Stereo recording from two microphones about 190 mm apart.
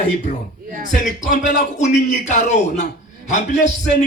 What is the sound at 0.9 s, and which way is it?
Music, 40° left (ahead or behind).